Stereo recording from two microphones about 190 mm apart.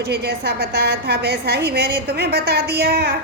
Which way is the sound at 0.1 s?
55° right (ahead or behind).